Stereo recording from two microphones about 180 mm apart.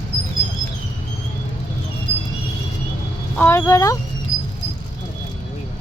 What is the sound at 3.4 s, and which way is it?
Speech, 15° left (ahead or behind).